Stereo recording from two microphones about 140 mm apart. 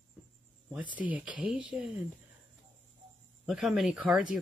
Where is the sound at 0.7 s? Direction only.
10° right (ahead or behind).